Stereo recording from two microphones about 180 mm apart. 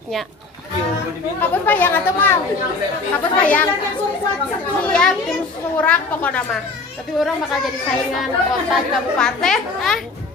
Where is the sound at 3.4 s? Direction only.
10° left (ahead or behind).